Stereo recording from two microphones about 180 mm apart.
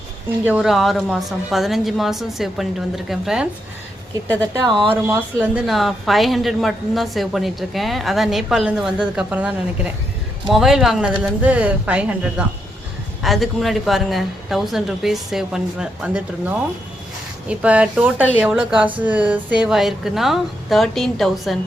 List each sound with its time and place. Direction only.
0.4 s a woman's voice: 5° right (ahead or behind)
4.6 s speech: 25° right (ahead or behind)
5.0 s a woman's voice: 5° right (ahead or behind)
17.5 s a woman's voice: 5° right (ahead or behind)